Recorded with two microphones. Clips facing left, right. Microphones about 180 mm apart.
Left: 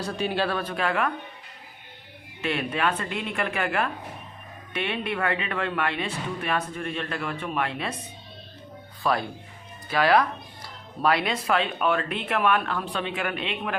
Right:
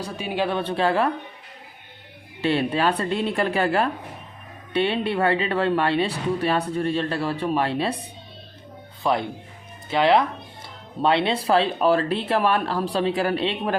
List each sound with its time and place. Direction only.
0.0 s speech: 10° right (ahead or behind); by 1.1 s 30° right (ahead or behind)
2.4 s speech: 30° right (ahead or behind)
9.0 s speech: 20° right (ahead or behind)